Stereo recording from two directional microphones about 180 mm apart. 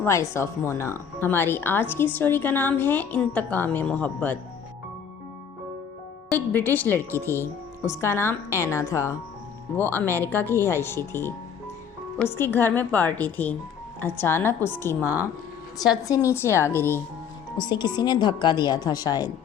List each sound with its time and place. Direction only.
0.0 s speech: 15° left (ahead or behind)
6.2 s speech: 10° left (ahead or behind)
17.6 s a woman's voice: 25° left (ahead or behind)